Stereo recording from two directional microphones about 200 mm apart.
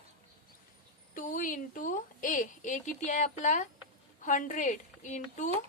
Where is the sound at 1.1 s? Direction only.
40° left (ahead or behind).